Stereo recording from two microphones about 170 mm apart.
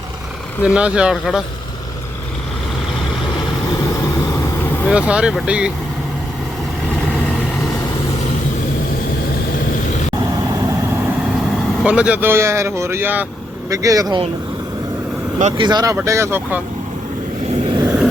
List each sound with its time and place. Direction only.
0.6 s speech: 5° right (ahead or behind)
4.9 s speech: 5° right (ahead or behind)
11.3 s speech: 5° right (ahead or behind); by 14.2 s 20° right (ahead or behind)
15.5 s speech: 25° right (ahead or behind)
17.8 s a sound: 5° right (ahead or behind)